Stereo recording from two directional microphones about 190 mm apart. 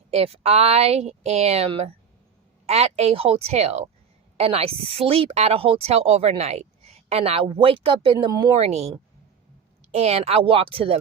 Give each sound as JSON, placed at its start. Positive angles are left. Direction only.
{"t": 0.1, "sound": "a woman's voice", "side_deg": -30}
{"t": 9.9, "sound": "a woman's voice", "side_deg": -35}